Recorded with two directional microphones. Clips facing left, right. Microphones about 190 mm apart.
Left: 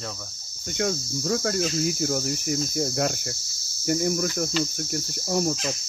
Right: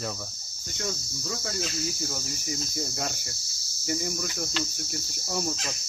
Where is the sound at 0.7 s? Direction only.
65° left (ahead or behind).